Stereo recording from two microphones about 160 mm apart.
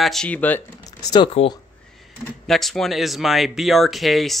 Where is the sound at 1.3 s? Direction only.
40° left (ahead or behind).